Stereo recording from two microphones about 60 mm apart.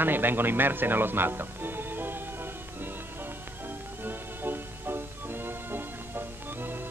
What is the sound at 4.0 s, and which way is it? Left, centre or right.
Music, right.